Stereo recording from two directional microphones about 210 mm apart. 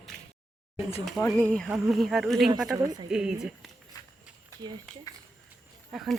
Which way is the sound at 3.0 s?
5° right (ahead or behind).